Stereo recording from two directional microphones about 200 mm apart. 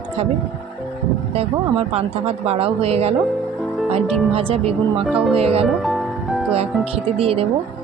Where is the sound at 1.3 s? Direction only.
30° right (ahead or behind).